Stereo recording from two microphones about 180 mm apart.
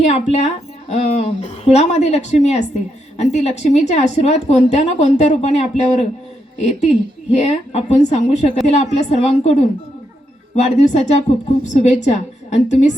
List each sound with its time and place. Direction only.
0.0 s a woman's voice: 40° left (ahead or behind)